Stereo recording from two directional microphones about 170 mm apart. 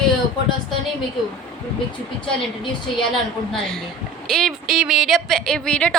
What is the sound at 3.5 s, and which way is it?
A woman's voice, 5° left (ahead or behind).